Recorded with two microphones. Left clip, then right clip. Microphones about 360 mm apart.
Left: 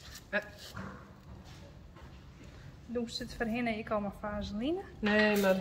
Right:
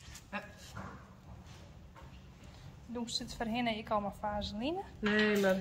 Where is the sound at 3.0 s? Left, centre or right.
Right.